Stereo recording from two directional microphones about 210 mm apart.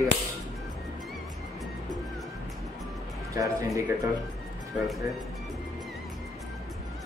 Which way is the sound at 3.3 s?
15° right (ahead or behind).